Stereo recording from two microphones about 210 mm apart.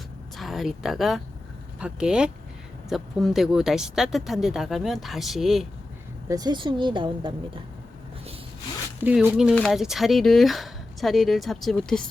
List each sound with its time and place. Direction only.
0.3 s speech: centre (ahead or behind)
6.2 s a woman's voice: 15° right (ahead or behind)
9.0 s speech: 5° right (ahead or behind)